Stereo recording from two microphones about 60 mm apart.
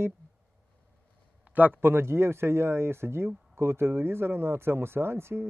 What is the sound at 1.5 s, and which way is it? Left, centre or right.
A man's voice, right.